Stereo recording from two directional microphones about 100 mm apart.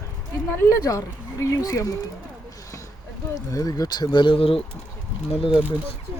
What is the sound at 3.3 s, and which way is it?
Speech, 40° left (ahead or behind).